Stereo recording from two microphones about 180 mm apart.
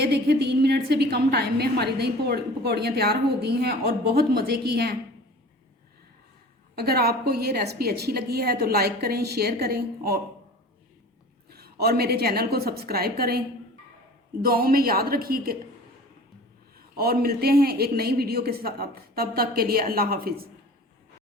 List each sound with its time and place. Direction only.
0.0 s a woman's voice: 65° right (ahead or behind)
6.7 s a woman's voice: 60° right (ahead or behind)
11.4 s a woman's voice: 60° right (ahead or behind)
14.4 s a woman's voice: 55° right (ahead or behind)
17.0 s a woman's voice: 60° right (ahead or behind)